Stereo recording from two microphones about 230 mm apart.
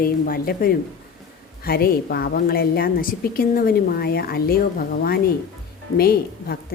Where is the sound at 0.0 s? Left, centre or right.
Left.